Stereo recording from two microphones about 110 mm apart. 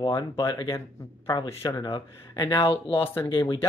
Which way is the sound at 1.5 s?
30° left (ahead or behind).